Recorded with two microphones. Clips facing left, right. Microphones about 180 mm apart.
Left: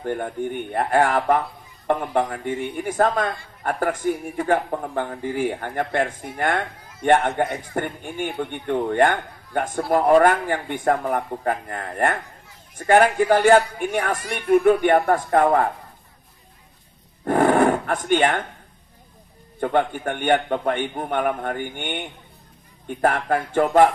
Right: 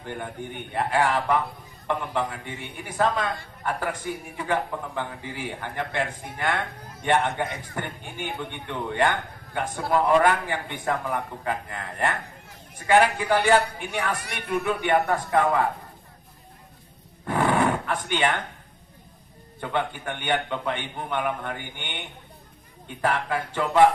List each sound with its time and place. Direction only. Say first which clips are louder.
0.0 s a man's voice: left 8 dB; 50° left (ahead or behind)
17.2 s a sound: left 6 dB; 45° left (ahead or behind)
19.6 s a man's voice: left 7 dB; 50° left (ahead or behind)